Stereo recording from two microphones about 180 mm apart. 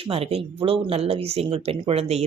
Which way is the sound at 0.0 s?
30° right (ahead or behind).